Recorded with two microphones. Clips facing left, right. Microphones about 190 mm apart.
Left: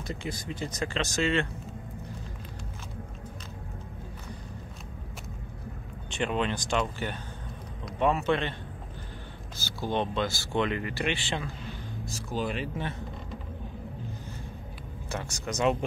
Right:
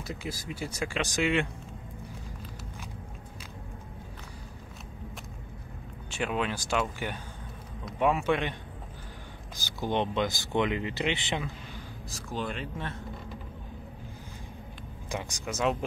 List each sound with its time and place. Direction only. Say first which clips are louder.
0.0 s speech: left 2 dB; 5° right (ahead or behind)
6.0 s speech: left 2 dB; 5° right (ahead or behind)
9.6 s speech: even; 15° right (ahead or behind)
12.1 s speech: left 3 dB; 5° left (ahead or behind)
15.0 s speech: even; 15° right (ahead or behind)
15.5 s speech: left 2 dB; centre (ahead or behind)